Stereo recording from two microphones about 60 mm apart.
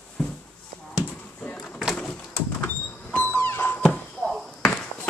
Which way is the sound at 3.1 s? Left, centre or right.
Left.